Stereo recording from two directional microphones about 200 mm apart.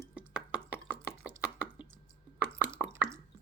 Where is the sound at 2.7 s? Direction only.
15° right (ahead or behind).